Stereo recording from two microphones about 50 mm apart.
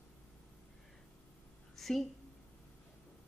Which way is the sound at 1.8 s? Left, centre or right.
Centre.